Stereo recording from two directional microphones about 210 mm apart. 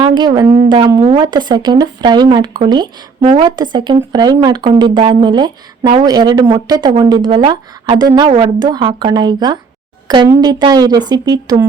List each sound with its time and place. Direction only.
0.0 s speech: 20° right (ahead or behind)